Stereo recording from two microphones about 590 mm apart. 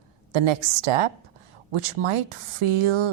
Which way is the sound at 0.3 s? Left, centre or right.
Right.